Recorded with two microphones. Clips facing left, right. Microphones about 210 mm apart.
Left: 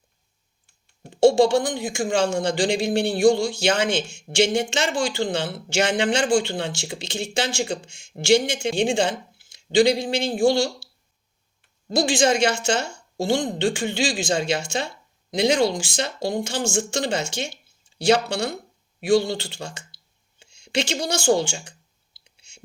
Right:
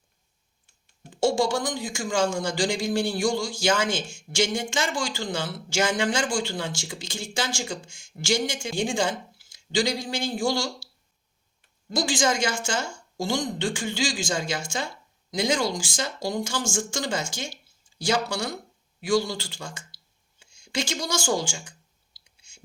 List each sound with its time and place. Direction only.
1.1 s speech: 65° left (ahead or behind)
4.9 s speech: 60° left (ahead or behind)
11.9 s a woman's voice: 65° left (ahead or behind)
18.3 s speech: 25° left (ahead or behind)
18.5 s a sound: 60° left (ahead or behind)
19.3 s speech: 65° left (ahead or behind)
20.5 s clicking: 70° left (ahead or behind)